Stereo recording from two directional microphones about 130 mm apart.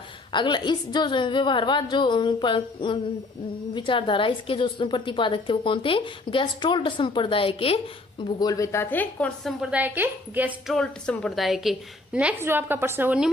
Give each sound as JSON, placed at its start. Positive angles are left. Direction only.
{"t": 0.3, "sound": "a woman's voice", "side_deg": 35}
{"t": 8.4, "sound": "a woman's voice", "side_deg": 25}
{"t": 8.8, "sound": "a woman's voice", "side_deg": 15}
{"t": 9.6, "sound": "a woman's voice", "side_deg": -10}
{"t": 10.7, "sound": "a woman's voice", "side_deg": 5}